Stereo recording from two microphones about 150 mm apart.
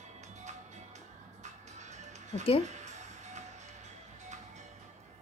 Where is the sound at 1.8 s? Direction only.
50° right (ahead or behind).